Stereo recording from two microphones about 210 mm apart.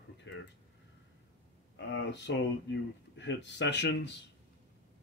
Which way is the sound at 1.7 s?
55° left (ahead or behind).